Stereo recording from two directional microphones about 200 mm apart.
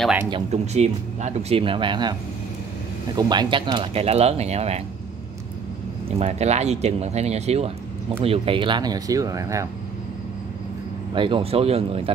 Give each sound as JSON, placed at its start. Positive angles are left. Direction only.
{"t": 0.3, "sound": "speech", "side_deg": -35}
{"t": 3.2, "sound": "speech", "side_deg": -20}
{"t": 6.0, "sound": "speech", "side_deg": -30}
{"t": 11.1, "sound": "speech", "side_deg": -25}